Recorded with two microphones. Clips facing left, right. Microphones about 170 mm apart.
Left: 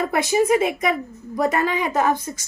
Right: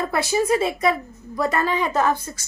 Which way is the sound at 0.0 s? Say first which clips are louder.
Left 2 dB; 20° left (ahead or behind).